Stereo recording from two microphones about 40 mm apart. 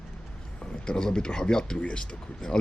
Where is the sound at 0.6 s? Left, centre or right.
Centre.